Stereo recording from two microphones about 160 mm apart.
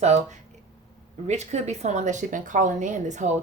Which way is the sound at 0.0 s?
40° right (ahead or behind).